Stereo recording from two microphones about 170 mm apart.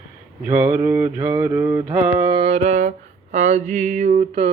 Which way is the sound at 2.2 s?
30° right (ahead or behind).